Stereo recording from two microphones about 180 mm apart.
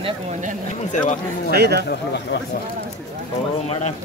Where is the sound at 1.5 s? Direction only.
65° right (ahead or behind).